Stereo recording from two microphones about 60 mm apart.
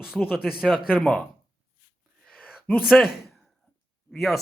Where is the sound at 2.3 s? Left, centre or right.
Left.